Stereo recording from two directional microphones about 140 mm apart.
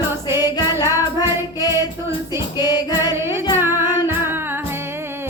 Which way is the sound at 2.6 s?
30° left (ahead or behind).